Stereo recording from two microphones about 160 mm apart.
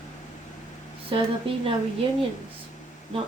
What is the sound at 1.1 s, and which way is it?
Speech, 35° right (ahead or behind).